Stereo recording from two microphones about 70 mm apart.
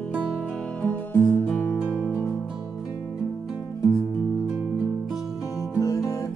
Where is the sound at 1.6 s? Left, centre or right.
Left.